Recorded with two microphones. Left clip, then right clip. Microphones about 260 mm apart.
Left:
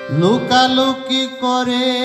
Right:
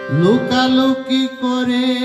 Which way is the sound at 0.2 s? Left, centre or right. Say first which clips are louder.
Left 2 dB; left.